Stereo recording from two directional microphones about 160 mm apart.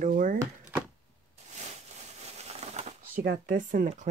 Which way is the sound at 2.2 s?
45° right (ahead or behind).